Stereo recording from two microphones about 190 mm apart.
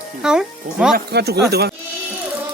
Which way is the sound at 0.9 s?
60° right (ahead or behind).